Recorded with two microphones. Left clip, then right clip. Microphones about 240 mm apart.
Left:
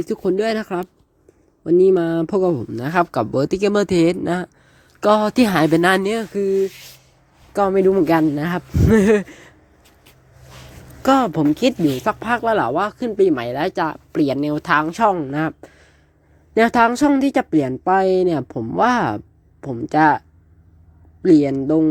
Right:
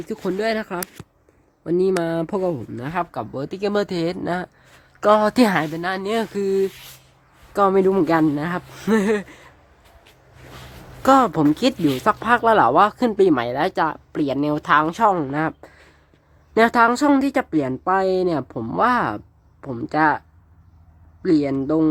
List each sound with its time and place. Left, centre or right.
0.2 s speech: centre
5.5 s speech: left
6.1 s speech: centre
8.9 s a sound: centre
11.0 s speech: centre